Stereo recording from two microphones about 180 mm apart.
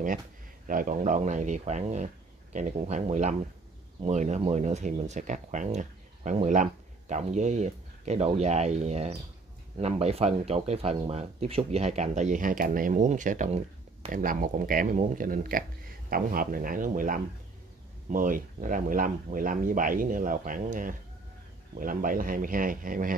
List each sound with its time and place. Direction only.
0.7 s speech: 50° right (ahead or behind)